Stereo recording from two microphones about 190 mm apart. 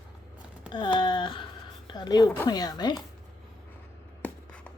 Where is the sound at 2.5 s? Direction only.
20° left (ahead or behind).